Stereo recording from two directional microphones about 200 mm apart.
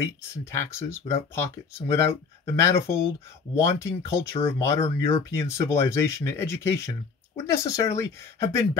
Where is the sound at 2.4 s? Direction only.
15° left (ahead or behind).